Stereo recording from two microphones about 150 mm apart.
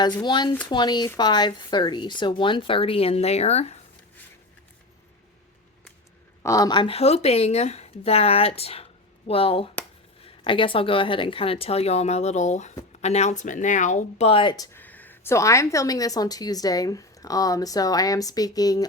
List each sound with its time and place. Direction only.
0.0 s a woman's voice: 30° left (ahead or behind); by 3.8 s 45° left (ahead or behind)
6.4 s speech: 20° left (ahead or behind)
14.8 s a woman's voice: 10° left (ahead or behind)